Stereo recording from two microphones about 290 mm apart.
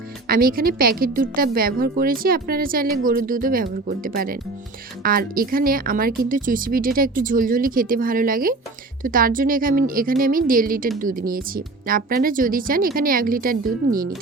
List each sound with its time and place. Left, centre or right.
0.3 s a woman's voice: right